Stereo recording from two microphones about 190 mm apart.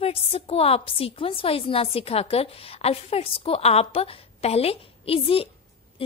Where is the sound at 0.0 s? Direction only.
30° left (ahead or behind).